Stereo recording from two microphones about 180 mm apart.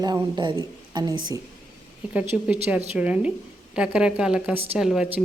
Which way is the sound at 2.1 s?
10° right (ahead or behind).